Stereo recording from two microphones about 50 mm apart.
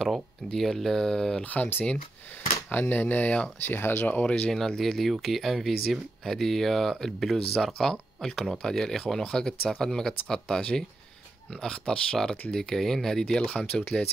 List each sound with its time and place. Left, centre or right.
0.6 s speech: centre
1.4 s speech: left
2.7 s speech: left
3.7 s speech: left
4.0 s speech: left
4.5 s speech: centre
13.3 s speech: centre